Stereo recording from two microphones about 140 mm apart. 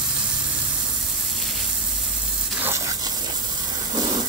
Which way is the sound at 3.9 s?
30° right (ahead or behind).